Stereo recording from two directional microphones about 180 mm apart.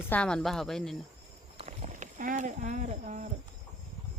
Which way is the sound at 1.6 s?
40° right (ahead or behind).